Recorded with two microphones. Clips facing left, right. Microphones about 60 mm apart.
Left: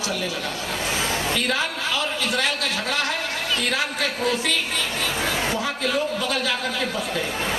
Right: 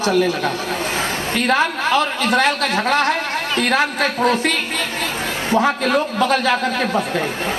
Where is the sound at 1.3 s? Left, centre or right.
Right.